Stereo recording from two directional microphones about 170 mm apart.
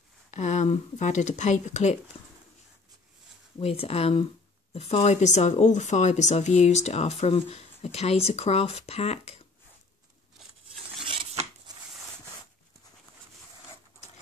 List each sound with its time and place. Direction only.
0.3 s speech: 45° left (ahead or behind)
3.5 s speech: 35° left (ahead or behind)
11.1 s filing: 30° right (ahead or behind)